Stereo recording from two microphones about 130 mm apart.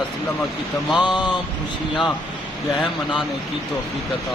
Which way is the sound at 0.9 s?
35° left (ahead or behind).